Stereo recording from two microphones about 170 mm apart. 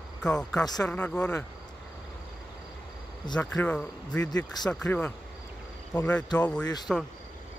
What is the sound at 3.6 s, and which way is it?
Speech, 5° left (ahead or behind).